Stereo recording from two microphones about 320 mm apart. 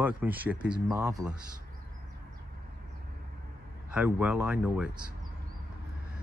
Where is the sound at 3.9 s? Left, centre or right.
Centre.